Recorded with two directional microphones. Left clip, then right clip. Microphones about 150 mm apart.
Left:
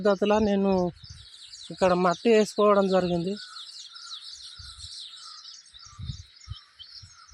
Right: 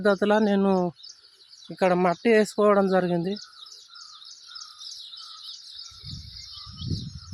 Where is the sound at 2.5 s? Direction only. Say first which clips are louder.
Right 1 dB; 30° right (ahead or behind).